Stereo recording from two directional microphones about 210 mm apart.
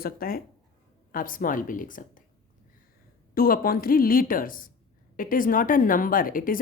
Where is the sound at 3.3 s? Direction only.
45° left (ahead or behind).